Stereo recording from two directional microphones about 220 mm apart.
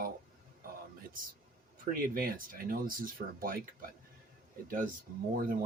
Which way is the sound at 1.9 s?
40° right (ahead or behind).